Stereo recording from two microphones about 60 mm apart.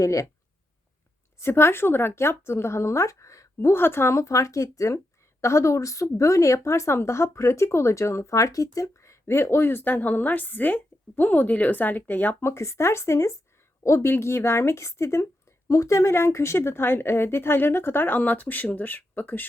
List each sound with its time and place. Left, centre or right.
0.0 s speech: left
1.4 s a woman's voice: left
9.2 s speech: left
12.4 s a woman's voice: left